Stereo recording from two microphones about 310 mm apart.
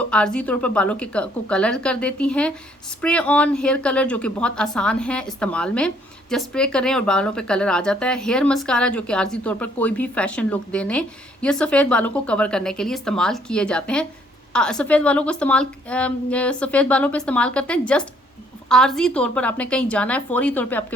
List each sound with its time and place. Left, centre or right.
0.0 s speech: centre